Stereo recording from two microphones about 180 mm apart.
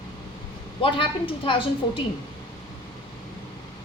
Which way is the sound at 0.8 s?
30° left (ahead or behind).